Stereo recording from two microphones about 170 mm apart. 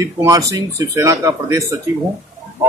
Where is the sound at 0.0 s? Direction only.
20° right (ahead or behind).